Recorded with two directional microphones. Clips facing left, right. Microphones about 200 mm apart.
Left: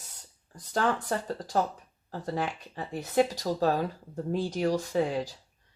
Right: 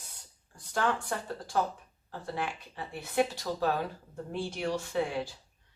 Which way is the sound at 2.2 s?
40° left (ahead or behind).